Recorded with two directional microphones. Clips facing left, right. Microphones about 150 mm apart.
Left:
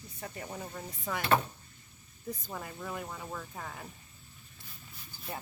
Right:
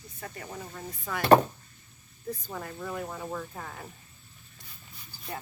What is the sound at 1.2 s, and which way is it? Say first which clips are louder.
Speech: right 9 dB; 40° right (ahead or behind).